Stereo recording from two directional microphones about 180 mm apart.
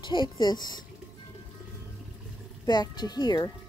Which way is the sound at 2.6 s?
25° left (ahead or behind).